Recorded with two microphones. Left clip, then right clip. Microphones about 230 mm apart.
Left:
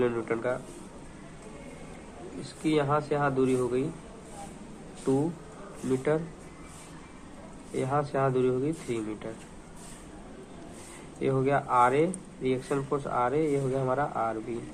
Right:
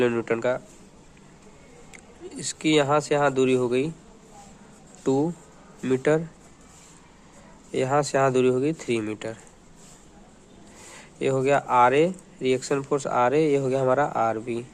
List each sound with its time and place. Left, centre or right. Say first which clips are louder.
0.0 s speech: right 5 dB; right
2.6 s speech: right 6 dB; right
5.9 s speech: right 6 dB; right
7.7 s speech: right 6 dB; right
11.2 s speech: right 5 dB; right